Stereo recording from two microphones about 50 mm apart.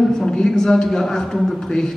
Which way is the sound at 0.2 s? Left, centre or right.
Centre.